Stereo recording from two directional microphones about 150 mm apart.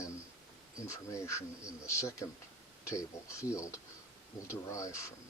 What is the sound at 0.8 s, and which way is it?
Speech, 20° left (ahead or behind).